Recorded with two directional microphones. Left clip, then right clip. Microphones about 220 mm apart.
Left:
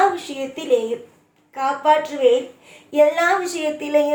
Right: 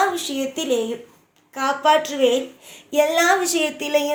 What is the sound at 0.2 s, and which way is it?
A woman's voice, 50° right (ahead or behind).